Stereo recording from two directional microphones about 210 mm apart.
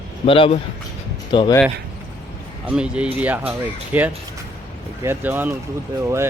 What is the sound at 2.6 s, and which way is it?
Speech, 5° right (ahead or behind).